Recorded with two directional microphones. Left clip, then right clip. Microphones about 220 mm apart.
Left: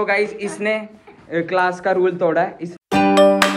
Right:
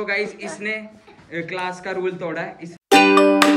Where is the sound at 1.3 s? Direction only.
10° left (ahead or behind).